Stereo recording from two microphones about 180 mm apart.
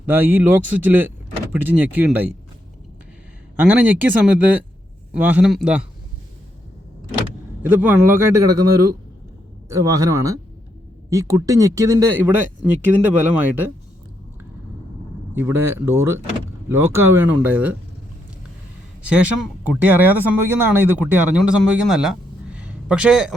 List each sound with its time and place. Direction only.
0.0 s speech: 10° right (ahead or behind)
3.6 s speech: 10° right (ahead or behind)
7.6 s speech: 10° right (ahead or behind)
15.4 s speech: 10° right (ahead or behind)
19.0 s speech: 5° right (ahead or behind)